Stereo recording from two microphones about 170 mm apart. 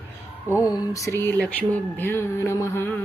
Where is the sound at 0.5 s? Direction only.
20° left (ahead or behind).